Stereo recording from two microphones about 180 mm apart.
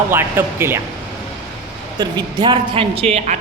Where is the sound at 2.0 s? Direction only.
25° right (ahead or behind).